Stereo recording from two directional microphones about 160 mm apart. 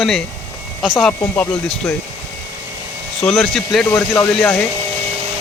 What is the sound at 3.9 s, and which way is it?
Speech, 10° left (ahead or behind).